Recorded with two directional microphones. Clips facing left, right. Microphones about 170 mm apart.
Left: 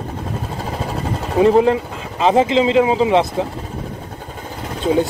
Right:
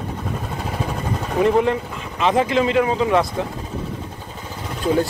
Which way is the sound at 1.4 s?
30° left (ahead or behind).